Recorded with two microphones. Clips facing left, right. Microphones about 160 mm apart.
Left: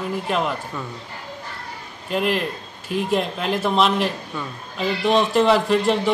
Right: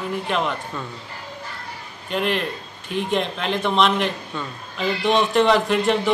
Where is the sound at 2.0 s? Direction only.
5° left (ahead or behind).